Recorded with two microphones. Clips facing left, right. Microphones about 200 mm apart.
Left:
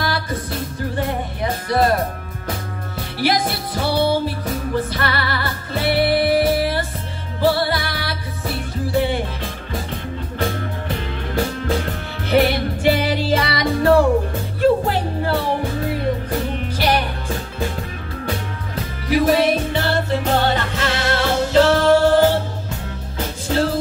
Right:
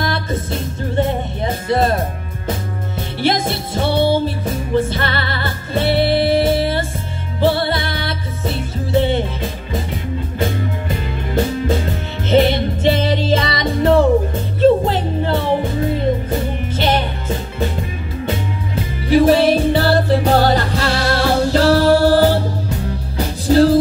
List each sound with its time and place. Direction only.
0.0 s music: 25° right (ahead or behind)
3.2 s music: 25° right (ahead or behind)
12.3 s music: 20° right (ahead or behind)
19.0 s music: 30° right (ahead or behind)